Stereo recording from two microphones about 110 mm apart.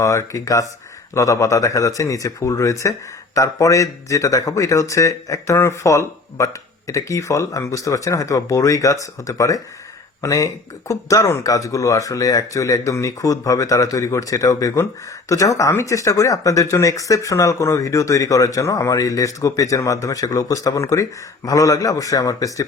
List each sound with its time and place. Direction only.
0.0 s speech: 25° left (ahead or behind)